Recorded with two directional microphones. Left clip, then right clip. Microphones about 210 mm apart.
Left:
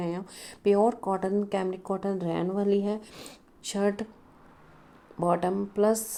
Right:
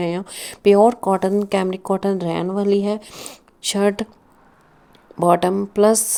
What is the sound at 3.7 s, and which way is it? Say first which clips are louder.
Speech: right 9 dB; 30° right (ahead or behind).